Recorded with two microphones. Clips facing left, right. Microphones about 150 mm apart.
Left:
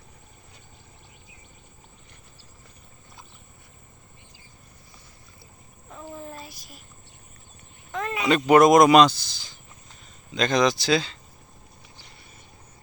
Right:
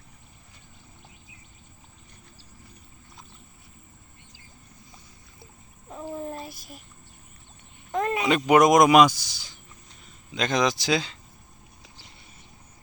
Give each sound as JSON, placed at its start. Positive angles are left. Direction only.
{"t": 5.9, "sound": "a sound", "side_deg": -25}
{"t": 6.4, "sound": "a child's voice", "side_deg": -50}
{"t": 7.9, "sound": "speech", "side_deg": -45}
{"t": 8.4, "sound": "speech", "side_deg": -10}